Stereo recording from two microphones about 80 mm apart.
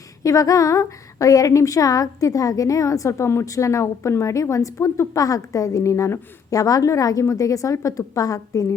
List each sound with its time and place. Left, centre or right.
0.2 s a woman's voice: left